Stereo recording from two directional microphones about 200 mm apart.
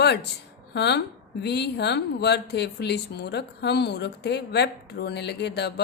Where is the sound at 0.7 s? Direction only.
55° left (ahead or behind).